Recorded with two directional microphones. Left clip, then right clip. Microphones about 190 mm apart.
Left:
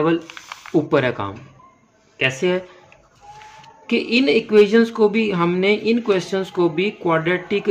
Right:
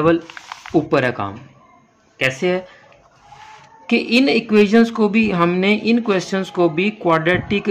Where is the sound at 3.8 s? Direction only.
20° right (ahead or behind).